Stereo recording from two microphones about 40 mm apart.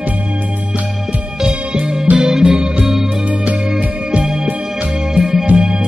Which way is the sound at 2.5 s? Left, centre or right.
Right.